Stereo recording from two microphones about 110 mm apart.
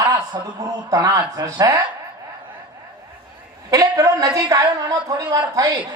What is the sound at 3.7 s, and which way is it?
A woman's voice, 30° right (ahead or behind).